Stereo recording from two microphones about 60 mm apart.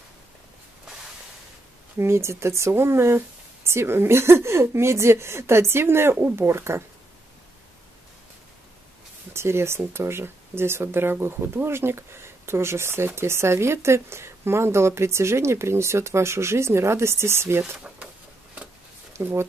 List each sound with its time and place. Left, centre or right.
2.0 s speech: right
9.3 s speech: right
19.2 s speech: right